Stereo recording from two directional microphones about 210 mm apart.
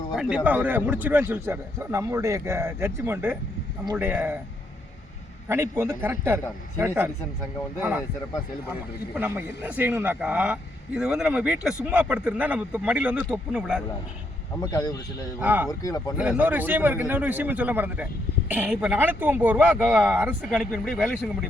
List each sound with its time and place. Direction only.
0.2 s a man's voice: 5° right (ahead or behind)
5.5 s a man's voice: 10° right (ahead or behind)
9.1 s a man's voice: 10° right (ahead or behind)
14.6 s speech: 15° left (ahead or behind)
15.4 s a man's voice: 10° right (ahead or behind)
15.8 s speech: 15° left (ahead or behind)
16.1 s a man's voice: 5° right (ahead or behind)